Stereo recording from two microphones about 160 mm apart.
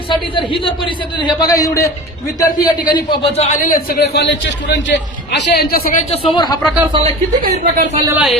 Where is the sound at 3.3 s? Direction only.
45° left (ahead or behind).